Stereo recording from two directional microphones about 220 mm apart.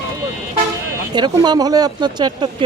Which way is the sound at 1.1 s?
20° right (ahead or behind).